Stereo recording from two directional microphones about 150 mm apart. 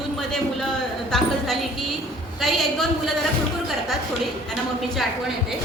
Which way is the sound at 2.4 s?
Centre (ahead or behind).